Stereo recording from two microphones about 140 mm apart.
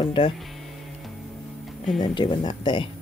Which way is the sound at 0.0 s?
40° left (ahead or behind).